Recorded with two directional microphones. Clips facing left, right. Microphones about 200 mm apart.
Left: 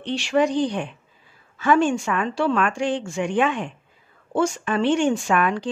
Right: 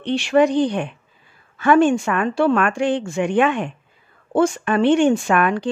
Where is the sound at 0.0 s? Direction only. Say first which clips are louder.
Right 5 dB; 55° right (ahead or behind).